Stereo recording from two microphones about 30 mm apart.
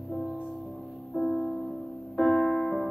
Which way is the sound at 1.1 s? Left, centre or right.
Left.